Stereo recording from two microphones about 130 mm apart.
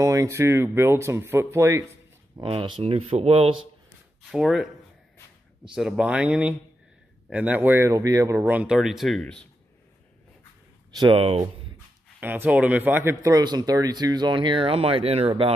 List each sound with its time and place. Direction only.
0.0 s speech: 25° right (ahead or behind)
2.4 s speech: 40° right (ahead or behind)
4.3 s speech: centre (ahead or behind)
5.8 s speech: 5° right (ahead or behind); by 8.5 s 25° right (ahead or behind)
8.5 s speech: 10° right (ahead or behind)
11.0 s speech: 45° right (ahead or behind)
12.2 s speech: 15° right (ahead or behind)
13.1 s speech: 25° right (ahead or behind); by 15.5 s 45° right (ahead or behind)